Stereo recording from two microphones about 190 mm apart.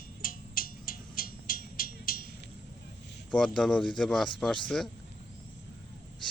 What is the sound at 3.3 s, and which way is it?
Speech, 5° left (ahead or behind).